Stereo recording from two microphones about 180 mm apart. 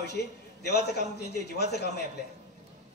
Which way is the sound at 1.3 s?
65° left (ahead or behind).